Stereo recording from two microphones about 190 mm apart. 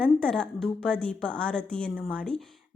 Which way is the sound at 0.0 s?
5° left (ahead or behind).